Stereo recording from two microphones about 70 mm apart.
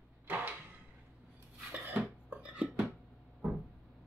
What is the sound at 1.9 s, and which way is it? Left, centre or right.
Dishes, centre.